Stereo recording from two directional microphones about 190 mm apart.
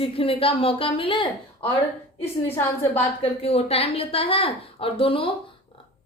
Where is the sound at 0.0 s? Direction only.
30° left (ahead or behind).